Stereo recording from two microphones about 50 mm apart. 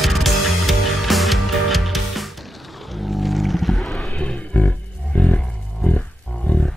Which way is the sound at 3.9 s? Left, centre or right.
Left.